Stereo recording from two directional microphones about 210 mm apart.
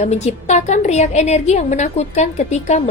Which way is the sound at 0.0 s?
35° left (ahead or behind).